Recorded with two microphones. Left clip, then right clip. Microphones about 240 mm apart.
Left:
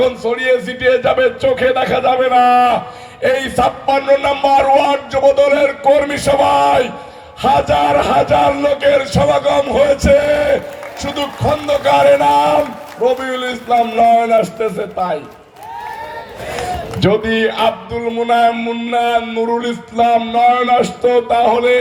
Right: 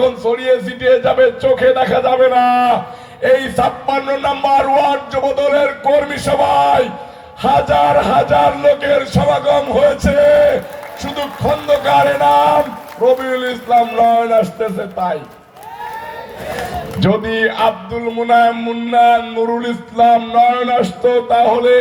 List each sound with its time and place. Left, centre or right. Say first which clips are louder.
0.0 s speech: even; left
16.6 s speech: left 3 dB; left